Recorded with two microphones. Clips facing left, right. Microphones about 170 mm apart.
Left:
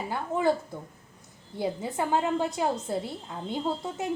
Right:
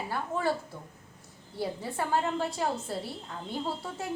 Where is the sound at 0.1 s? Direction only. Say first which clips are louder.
Left 5 dB; 20° left (ahead or behind).